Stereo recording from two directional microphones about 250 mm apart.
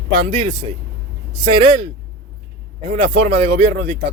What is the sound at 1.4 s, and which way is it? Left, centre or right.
Speech, right.